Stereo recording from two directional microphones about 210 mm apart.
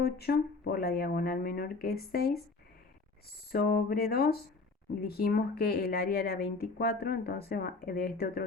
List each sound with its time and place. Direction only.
0.0 s speech: 50° left (ahead or behind)
3.5 s speech: 50° left (ahead or behind)